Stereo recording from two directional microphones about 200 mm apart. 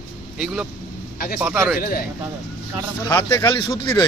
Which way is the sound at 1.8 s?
45° left (ahead or behind).